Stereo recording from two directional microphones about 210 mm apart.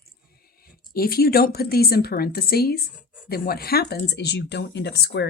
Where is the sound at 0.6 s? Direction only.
45° left (ahead or behind).